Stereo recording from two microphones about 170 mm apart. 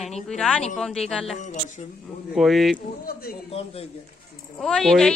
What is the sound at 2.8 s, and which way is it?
Speech, 60° left (ahead or behind).